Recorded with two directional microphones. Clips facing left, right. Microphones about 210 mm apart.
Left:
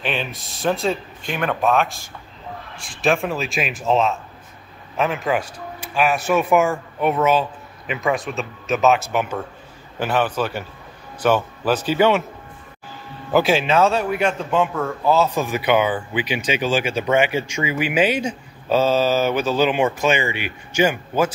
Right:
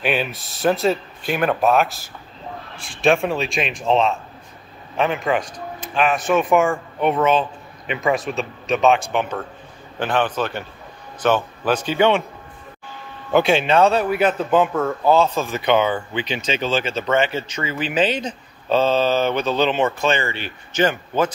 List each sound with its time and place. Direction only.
0.0 s speech: 5° right (ahead or behind)
13.3 s speech: 5° left (ahead or behind)
15.3 s speech: 15° left (ahead or behind)